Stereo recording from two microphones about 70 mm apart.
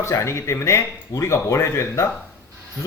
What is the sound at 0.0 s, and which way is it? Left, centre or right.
Speech, left.